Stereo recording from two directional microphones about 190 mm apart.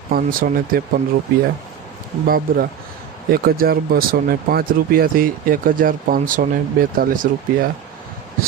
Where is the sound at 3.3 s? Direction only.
50° right (ahead or behind).